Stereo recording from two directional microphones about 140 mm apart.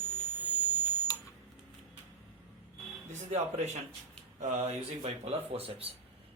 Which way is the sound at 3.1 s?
55° right (ahead or behind).